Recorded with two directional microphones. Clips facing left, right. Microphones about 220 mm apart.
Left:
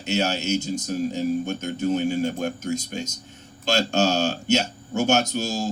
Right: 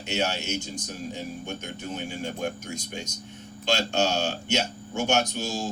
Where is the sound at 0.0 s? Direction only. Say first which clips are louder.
Left 4 dB; 40° left (ahead or behind).